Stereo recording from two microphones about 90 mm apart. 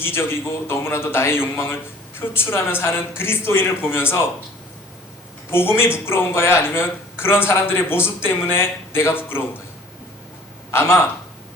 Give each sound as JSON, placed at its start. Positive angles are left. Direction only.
{"t": 0.0, "sound": "a man's voice", "side_deg": 25}
{"t": 5.5, "sound": "a man's voice", "side_deg": 25}
{"t": 10.7, "sound": "a man's voice", "side_deg": 30}